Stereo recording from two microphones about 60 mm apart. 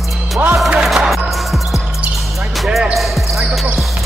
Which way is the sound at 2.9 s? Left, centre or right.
Centre.